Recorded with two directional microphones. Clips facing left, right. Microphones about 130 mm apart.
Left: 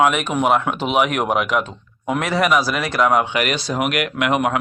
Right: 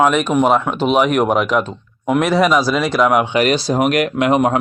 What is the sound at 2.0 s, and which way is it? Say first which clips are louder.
A man's voice: right 5 dB; 15° right (ahead or behind).